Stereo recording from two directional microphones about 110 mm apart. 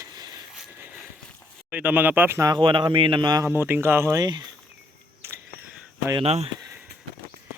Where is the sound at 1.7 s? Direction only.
15° right (ahead or behind).